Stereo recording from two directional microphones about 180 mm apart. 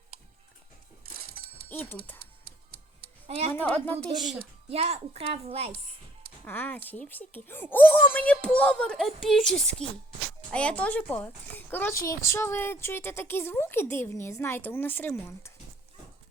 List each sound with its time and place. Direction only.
1.7 s a woman's voice: 10° left (ahead or behind)
3.2 s speech: 35° right (ahead or behind)
3.5 s a woman's voice: 10° left (ahead or behind)
4.7 s a child's voice: 35° right (ahead or behind)
6.4 s a woman's voice: 10° left (ahead or behind)